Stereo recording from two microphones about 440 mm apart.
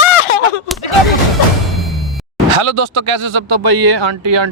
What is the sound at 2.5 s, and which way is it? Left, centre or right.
Speech, right.